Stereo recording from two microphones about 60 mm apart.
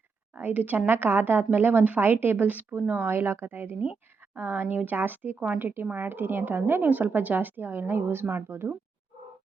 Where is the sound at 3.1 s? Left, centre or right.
Right.